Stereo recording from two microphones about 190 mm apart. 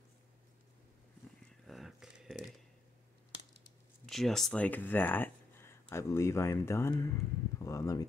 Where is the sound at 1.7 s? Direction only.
Centre (ahead or behind).